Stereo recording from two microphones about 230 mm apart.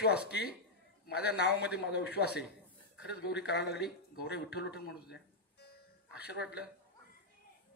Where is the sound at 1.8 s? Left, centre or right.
Left.